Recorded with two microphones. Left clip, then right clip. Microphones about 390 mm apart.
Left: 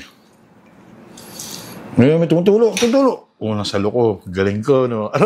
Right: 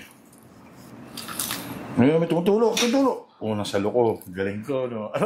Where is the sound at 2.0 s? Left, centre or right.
Left.